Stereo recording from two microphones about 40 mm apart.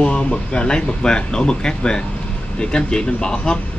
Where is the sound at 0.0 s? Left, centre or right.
Left.